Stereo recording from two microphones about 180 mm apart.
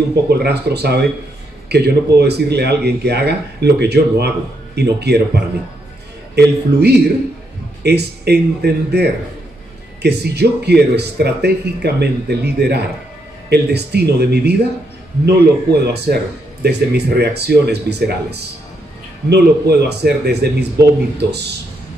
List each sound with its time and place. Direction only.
0.1 s speech: 65° right (ahead or behind)